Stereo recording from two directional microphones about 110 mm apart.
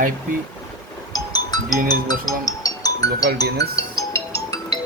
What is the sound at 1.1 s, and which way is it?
Music, 35° left (ahead or behind).